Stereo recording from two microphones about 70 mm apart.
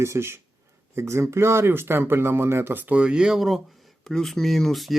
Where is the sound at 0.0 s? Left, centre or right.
Right.